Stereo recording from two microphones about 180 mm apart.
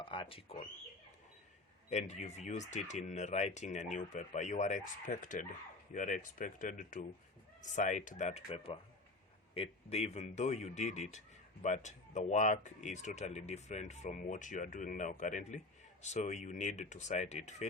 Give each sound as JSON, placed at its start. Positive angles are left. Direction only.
{"t": 0.0, "sound": "speech", "side_deg": 30}
{"t": 1.9, "sound": "speech", "side_deg": 40}